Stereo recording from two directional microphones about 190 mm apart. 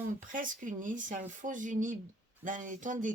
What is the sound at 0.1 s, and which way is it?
Speech, 45° right (ahead or behind).